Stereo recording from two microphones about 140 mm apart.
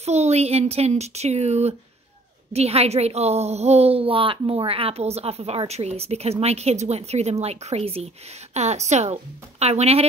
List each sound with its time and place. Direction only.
0.0 s a woman's voice: 50° right (ahead or behind)